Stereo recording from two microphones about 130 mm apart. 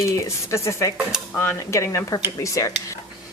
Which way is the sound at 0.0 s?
25° left (ahead or behind).